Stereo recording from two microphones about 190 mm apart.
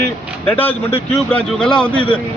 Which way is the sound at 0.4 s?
10° left (ahead or behind).